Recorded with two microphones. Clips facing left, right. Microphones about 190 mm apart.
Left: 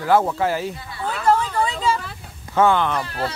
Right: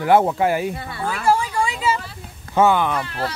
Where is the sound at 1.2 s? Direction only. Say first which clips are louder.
Left 1 dB; 10° right (ahead or behind).